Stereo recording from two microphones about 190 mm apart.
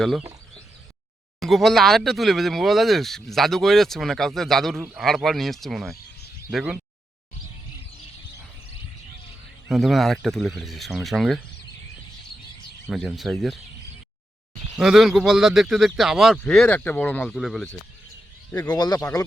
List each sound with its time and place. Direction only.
1.4 s speech: centre (ahead or behind)
9.6 s speech: centre (ahead or behind)
12.9 s speech: centre (ahead or behind)
14.8 s speech: centre (ahead or behind)
18.7 s speech: 20° left (ahead or behind)